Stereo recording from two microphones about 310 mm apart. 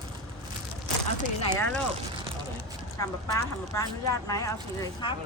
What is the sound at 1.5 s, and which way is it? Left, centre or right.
Speech, centre.